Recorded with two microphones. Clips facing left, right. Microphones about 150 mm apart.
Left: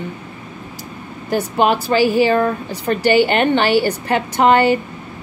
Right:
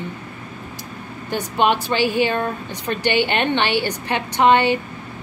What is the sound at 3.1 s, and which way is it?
A woman's voice, 45° left (ahead or behind).